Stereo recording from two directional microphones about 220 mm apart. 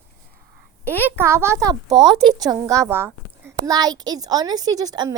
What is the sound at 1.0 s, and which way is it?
A woman's voice, 10° right (ahead or behind).